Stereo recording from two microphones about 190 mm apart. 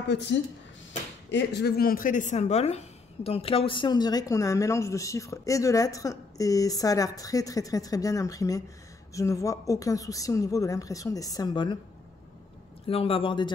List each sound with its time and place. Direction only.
0.1 s a woman's voice: 65° left (ahead or behind); by 11.8 s 25° left (ahead or behind)
12.8 s speech: 30° left (ahead or behind)